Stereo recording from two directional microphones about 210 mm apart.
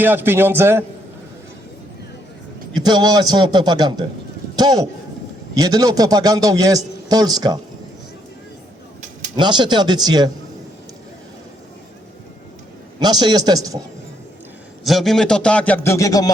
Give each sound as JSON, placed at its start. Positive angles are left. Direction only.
{"t": 0.0, "sound": "a man's voice", "side_deg": -10}
{"t": 2.7, "sound": "a man's voice", "side_deg": -20}
{"t": 9.3, "sound": "a man's voice", "side_deg": -20}
{"t": 13.0, "sound": "a man's voice", "side_deg": -20}
{"t": 14.8, "sound": "speech", "side_deg": 0}